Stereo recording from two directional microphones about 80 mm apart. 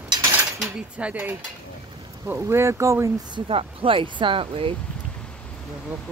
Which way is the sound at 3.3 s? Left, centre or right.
Right.